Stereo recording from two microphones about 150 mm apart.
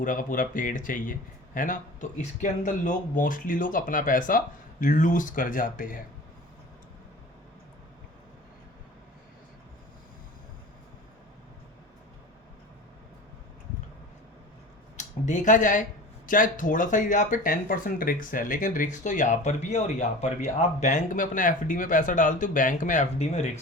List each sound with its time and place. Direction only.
0.0 s speech: 60° left (ahead or behind)
14.9 s speech: 55° left (ahead or behind)